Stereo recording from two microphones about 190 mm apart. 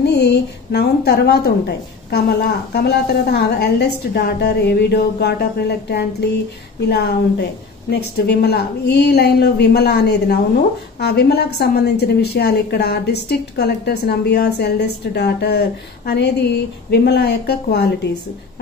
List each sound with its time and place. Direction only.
0.0 s a woman's voice: 60° left (ahead or behind)